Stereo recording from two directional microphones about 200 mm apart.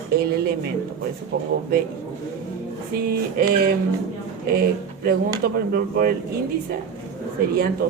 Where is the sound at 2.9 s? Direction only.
45° right (ahead or behind).